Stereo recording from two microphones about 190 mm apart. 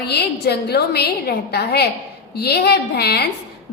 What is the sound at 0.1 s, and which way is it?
A woman's voice, 60° left (ahead or behind).